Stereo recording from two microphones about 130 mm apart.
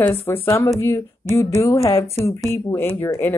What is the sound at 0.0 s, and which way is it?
Speech, 15° left (ahead or behind).